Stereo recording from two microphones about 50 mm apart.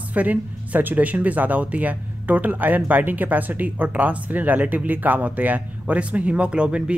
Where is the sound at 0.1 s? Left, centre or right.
Right.